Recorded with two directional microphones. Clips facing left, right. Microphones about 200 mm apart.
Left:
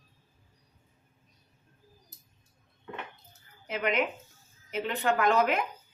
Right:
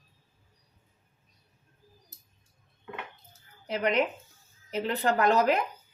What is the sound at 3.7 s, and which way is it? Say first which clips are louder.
Speech: right 2 dB; 35° right (ahead or behind).